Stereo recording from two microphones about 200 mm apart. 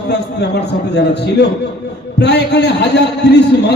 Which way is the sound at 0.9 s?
55° left (ahead or behind).